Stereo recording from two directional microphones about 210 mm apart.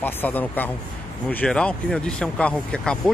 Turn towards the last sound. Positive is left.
turn(degrees=5)  # may be behind; listen again after turning